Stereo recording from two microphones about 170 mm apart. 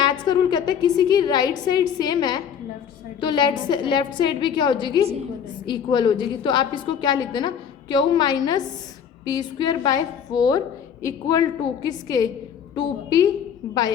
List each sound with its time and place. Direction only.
0.0 s a woman's voice: 25° left (ahead or behind)